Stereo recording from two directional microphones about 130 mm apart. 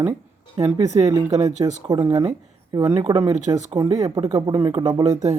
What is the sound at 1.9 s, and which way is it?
A man's voice, 30° right (ahead or behind).